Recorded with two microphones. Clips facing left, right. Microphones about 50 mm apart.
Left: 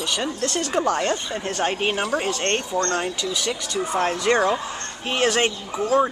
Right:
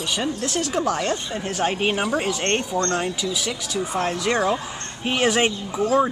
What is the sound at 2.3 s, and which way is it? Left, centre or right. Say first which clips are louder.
Speech: right 1 dB; centre.